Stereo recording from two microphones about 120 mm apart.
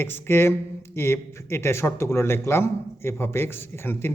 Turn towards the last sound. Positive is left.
turn(degrees=20)  # may be behind; listen again after turning